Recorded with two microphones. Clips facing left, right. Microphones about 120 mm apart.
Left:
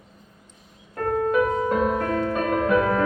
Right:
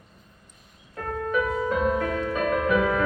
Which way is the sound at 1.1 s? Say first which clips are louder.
Left 4 dB; 35° left (ahead or behind).